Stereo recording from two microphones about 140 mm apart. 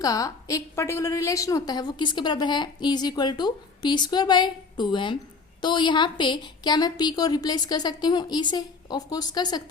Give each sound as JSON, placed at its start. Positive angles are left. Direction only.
{"t": 0.0, "sound": "a woman's voice", "side_deg": 25}